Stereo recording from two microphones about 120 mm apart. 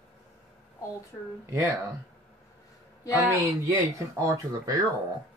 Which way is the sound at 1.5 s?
25° right (ahead or behind).